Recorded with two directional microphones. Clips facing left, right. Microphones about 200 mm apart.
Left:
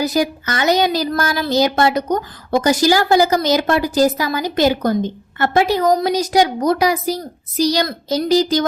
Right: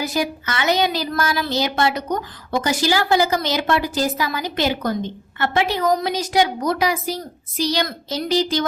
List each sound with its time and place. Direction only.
0.0 s a woman's voice: 40° left (ahead or behind)